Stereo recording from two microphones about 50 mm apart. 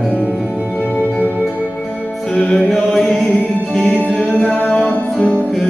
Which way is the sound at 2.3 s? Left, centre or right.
Centre.